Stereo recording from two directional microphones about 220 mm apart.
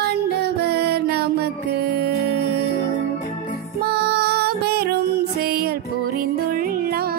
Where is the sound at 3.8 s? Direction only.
45° right (ahead or behind).